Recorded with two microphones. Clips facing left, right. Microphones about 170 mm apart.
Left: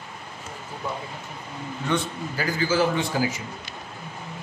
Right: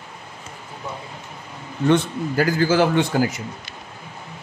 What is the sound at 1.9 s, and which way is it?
A man's voice, 70° right (ahead or behind).